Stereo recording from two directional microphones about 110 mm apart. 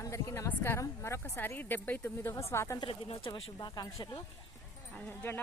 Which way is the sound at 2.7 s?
50° left (ahead or behind).